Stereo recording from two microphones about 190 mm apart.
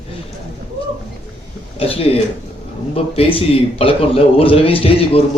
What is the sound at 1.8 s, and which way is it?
A man's voice, 30° left (ahead or behind).